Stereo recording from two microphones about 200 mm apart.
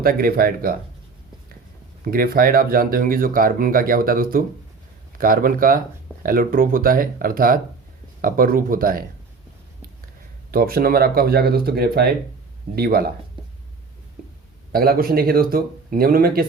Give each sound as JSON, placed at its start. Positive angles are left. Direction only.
{"t": 0.0, "sound": "speech", "side_deg": -45}
{"t": 2.0, "sound": "speech", "side_deg": -45}
{"t": 10.5, "sound": "speech", "side_deg": -50}
{"t": 14.7, "sound": "speech", "side_deg": -50}